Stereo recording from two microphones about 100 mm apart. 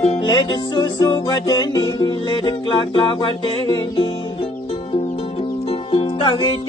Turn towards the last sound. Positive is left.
turn(degrees=65)  # may be behind; listen again after turning